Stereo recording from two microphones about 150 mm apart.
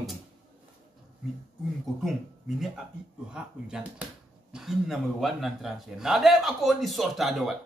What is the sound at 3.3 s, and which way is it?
A man's voice, 5° right (ahead or behind).